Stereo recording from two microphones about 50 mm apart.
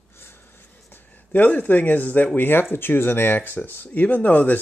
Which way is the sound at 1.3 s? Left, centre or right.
Left.